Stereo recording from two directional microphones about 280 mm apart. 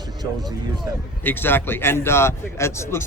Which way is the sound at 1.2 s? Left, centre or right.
Centre.